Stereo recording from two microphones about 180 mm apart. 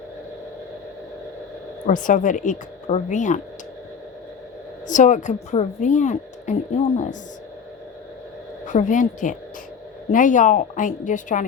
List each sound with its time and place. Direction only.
1.9 s a woman's voice: 45° left (ahead or behind)
4.9 s a woman's voice: 45° left (ahead or behind)
8.6 s a woman's voice: 45° left (ahead or behind)